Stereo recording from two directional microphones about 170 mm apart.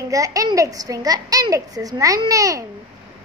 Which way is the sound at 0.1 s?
20° right (ahead or behind).